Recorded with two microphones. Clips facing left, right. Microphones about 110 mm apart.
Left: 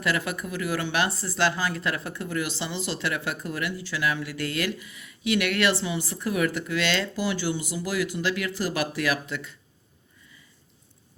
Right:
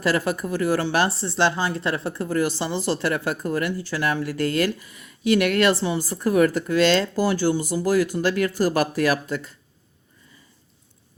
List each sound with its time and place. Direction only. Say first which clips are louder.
0.0 s speech: right 5 dB; 35° right (ahead or behind)